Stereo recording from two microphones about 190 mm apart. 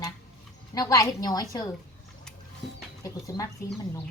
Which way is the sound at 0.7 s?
20° left (ahead or behind).